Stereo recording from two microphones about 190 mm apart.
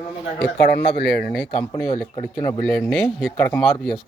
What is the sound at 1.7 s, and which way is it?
Speech, 15° left (ahead or behind).